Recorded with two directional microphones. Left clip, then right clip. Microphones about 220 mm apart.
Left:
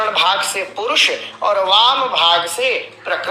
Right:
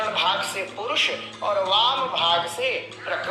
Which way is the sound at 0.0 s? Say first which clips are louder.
Left 7 dB; 45° left (ahead or behind).